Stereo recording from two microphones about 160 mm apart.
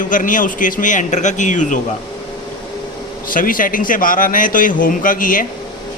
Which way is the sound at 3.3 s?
60° left (ahead or behind).